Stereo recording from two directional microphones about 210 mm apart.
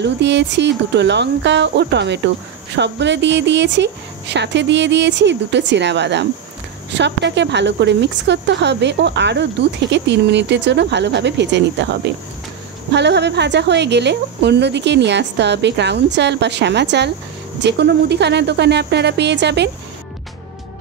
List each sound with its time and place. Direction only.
0.0 s speech: 55° right (ahead or behind)